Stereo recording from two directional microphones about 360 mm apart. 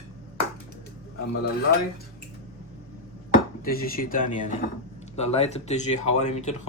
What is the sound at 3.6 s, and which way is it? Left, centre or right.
Speech, left.